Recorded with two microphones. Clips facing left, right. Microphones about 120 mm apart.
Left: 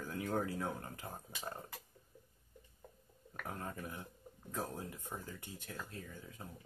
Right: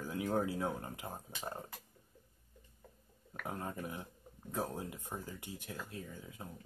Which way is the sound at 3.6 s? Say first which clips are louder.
Right 3 dB; 20° right (ahead or behind).